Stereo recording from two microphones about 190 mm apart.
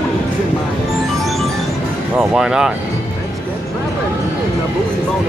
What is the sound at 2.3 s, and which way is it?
Speech, 5° right (ahead or behind).